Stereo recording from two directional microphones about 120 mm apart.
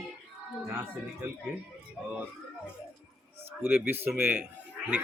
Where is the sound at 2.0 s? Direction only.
5° right (ahead or behind).